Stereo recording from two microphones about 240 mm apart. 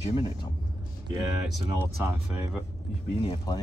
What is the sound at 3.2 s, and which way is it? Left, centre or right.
Speech, centre.